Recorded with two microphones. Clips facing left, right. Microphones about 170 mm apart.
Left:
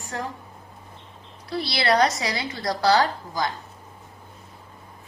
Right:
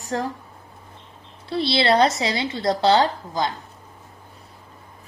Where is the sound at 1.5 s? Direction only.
25° right (ahead or behind).